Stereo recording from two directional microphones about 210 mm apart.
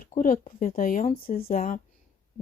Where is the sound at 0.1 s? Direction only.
40° left (ahead or behind).